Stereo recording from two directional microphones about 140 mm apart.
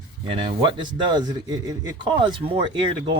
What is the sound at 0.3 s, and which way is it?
A man's voice, 40° right (ahead or behind).